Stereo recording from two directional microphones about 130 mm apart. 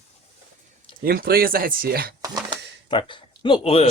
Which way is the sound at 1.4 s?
90° right.